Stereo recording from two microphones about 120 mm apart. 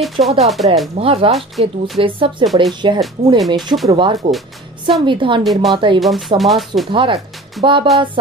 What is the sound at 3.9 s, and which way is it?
Speech, 50° right (ahead or behind).